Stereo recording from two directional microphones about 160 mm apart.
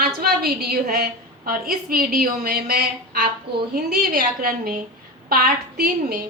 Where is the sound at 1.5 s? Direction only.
65° right (ahead or behind).